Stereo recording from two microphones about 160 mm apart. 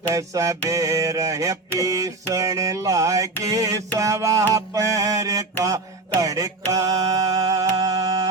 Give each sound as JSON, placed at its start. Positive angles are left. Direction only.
{"t": 0.1, "sound": "mantra", "side_deg": -20}